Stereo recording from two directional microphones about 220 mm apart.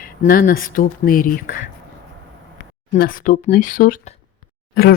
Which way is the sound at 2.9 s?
40° left (ahead or behind).